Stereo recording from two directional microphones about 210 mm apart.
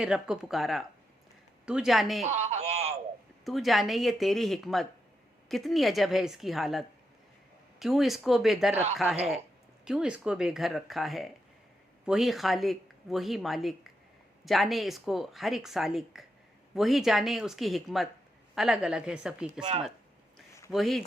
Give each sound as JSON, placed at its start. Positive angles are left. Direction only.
{"t": 0.0, "sound": "speech", "side_deg": -5}
{"t": 2.2, "sound": "speech", "side_deg": -30}
{"t": 3.4, "sound": "speech", "side_deg": 0}
{"t": 8.7, "sound": "speech", "side_deg": -30}
{"t": 9.8, "sound": "speech", "side_deg": -5}
{"t": 20.7, "sound": "speech", "side_deg": 0}